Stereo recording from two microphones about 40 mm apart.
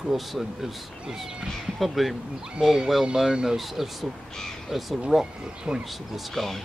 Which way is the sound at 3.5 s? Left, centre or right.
Centre.